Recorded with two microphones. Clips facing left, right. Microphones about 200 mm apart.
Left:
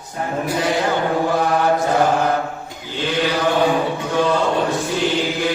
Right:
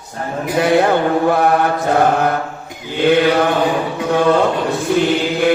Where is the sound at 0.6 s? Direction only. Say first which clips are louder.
Right 8 dB; 60° right (ahead or behind).